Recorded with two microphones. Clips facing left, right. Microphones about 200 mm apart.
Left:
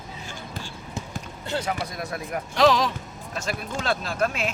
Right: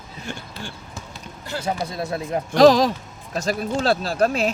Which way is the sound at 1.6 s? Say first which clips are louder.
Right 3 dB; 25° right (ahead or behind).